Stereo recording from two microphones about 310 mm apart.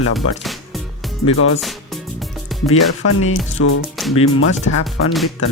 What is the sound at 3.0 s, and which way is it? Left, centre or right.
Speech, left.